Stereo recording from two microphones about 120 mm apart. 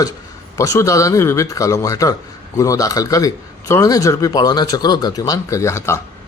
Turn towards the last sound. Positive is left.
turn(degrees=20)  # may be behind; listen again after turning